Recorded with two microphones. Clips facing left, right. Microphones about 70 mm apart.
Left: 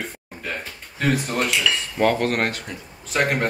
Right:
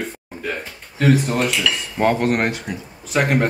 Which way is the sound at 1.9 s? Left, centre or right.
Right.